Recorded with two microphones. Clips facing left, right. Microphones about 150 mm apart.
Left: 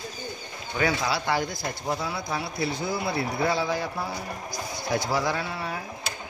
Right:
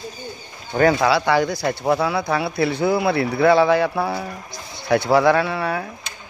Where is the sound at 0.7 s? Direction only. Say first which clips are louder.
Right 9 dB; 50° right (ahead or behind).